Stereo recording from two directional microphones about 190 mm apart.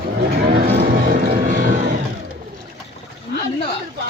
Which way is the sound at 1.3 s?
45° right (ahead or behind).